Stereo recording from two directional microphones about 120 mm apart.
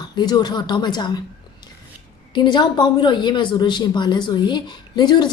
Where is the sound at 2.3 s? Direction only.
40° left (ahead or behind).